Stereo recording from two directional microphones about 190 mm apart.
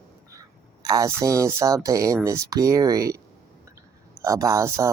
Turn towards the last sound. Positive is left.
turn(degrees=-15)  # may be behind; listen again after turning